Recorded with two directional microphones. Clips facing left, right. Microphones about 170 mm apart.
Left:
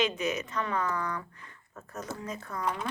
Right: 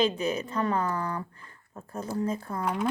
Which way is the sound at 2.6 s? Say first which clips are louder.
Right 5 dB; 10° right (ahead or behind).